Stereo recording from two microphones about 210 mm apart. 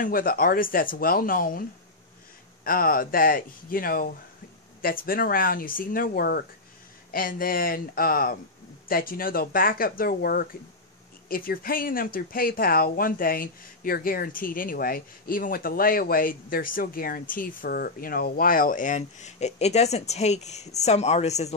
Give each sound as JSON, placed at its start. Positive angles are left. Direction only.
{"t": 0.0, "sound": "speech", "side_deg": 40}
{"t": 2.6, "sound": "speech", "side_deg": 45}